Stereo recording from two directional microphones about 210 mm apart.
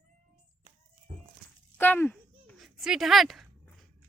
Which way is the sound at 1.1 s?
30° right (ahead or behind).